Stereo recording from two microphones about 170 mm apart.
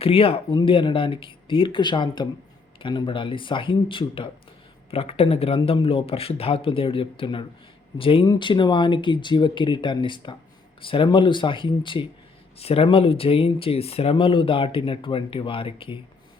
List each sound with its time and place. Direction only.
0.0 s speech: 35° left (ahead or behind)